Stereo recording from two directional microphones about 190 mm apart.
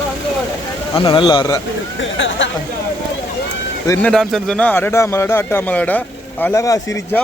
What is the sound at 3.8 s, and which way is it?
Speech, 15° left (ahead or behind).